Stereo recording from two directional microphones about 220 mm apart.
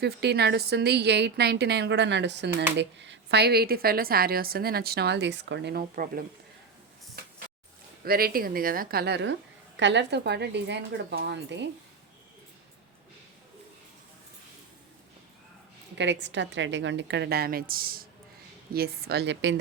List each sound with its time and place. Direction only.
0.0 s a woman's voice: 50° right (ahead or behind)
8.0 s a woman's voice: 45° right (ahead or behind)
16.0 s a woman's voice: 55° right (ahead or behind)